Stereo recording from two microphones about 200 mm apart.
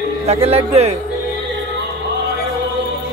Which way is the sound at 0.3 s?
30° right (ahead or behind).